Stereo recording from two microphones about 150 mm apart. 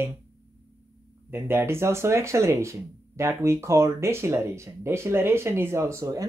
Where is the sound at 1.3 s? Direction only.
15° right (ahead or behind).